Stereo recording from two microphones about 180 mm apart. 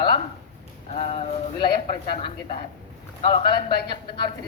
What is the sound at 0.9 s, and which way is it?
A man's voice, 35° left (ahead or behind).